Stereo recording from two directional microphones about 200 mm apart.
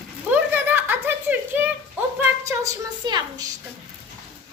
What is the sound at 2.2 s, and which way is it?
A woman's voice, 15° right (ahead or behind).